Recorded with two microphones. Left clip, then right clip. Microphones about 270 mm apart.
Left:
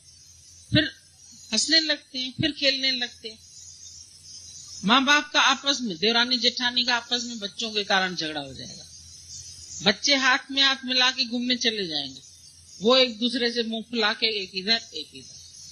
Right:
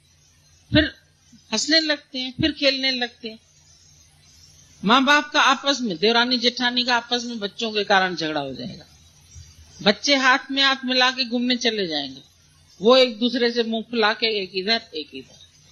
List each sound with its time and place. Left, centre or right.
0.7 s a man's voice: left
4.9 s a man's voice: left
9.8 s a man's voice: left